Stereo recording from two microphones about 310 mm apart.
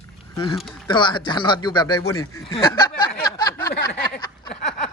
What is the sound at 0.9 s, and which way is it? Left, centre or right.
Speech, centre.